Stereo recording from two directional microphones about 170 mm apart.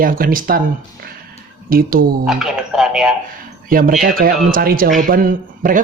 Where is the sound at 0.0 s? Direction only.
55° right (ahead or behind).